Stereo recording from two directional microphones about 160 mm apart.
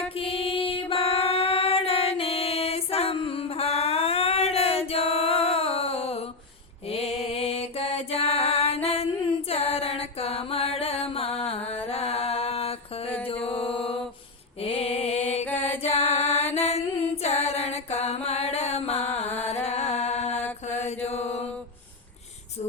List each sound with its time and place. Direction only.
0.2 s music: 35° left (ahead or behind)
13.2 s mantra: 35° left (ahead or behind)
15.6 s music: 40° left (ahead or behind)
17.4 s mantra: 40° left (ahead or behind)
19.5 s music: 45° left (ahead or behind)
20.8 s mantra: 40° left (ahead or behind)